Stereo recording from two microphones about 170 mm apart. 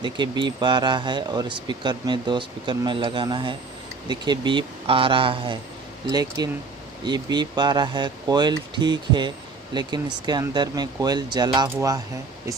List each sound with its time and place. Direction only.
0.0 s speech: 25° right (ahead or behind)